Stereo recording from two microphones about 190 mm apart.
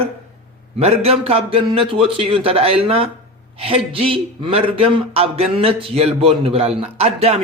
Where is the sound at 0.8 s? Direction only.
30° right (ahead or behind).